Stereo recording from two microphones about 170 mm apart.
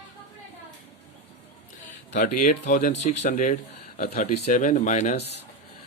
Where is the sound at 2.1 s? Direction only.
50° left (ahead or behind).